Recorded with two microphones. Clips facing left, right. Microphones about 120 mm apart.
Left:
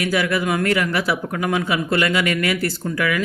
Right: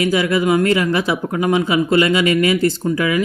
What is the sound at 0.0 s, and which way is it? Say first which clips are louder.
Speech: right 4 dB; 25° right (ahead or behind).